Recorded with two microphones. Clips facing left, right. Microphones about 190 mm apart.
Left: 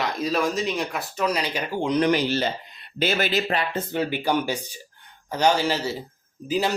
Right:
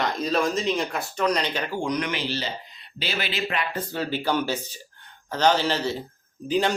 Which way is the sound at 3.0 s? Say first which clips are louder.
Left 6 dB; 50° left (ahead or behind).